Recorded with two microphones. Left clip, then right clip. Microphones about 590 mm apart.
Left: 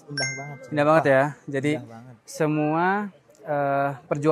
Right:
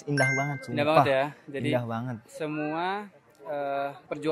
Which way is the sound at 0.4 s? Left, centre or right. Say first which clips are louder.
Right 7 dB; right.